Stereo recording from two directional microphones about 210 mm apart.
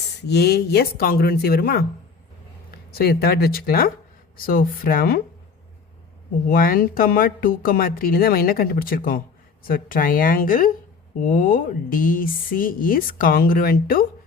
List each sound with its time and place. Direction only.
0.3 s speech: 50° left (ahead or behind)
2.9 s speech: 45° left (ahead or behind)
6.5 s speech: 45° left (ahead or behind)